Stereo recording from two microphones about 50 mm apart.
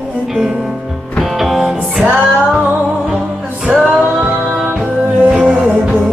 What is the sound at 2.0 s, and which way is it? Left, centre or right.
Music, right.